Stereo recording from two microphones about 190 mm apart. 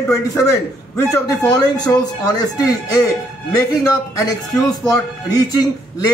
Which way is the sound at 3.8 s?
15° left (ahead or behind).